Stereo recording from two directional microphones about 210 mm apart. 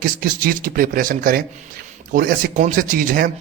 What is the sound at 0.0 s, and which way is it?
A man's voice, 40° right (ahead or behind).